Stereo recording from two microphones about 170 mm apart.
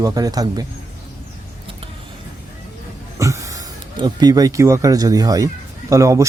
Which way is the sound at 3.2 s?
20° right (ahead or behind).